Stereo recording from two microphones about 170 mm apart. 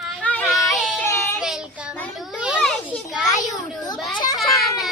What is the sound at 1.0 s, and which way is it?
Child singing, 15° left (ahead or behind).